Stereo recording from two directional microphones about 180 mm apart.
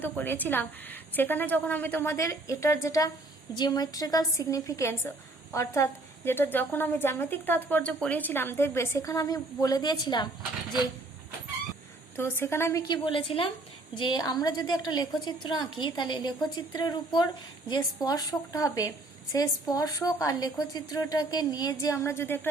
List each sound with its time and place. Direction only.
0.0 s a woman's voice: 10° left (ahead or behind)
12.1 s a woman's voice: 15° left (ahead or behind)
13.1 s a woman's voice: 30° left (ahead or behind)